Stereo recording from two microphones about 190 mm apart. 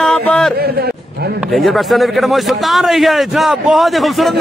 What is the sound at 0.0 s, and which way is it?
Music, 5° left (ahead or behind).